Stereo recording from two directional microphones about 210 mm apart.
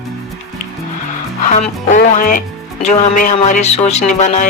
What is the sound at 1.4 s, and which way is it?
Speech, 35° left (ahead or behind).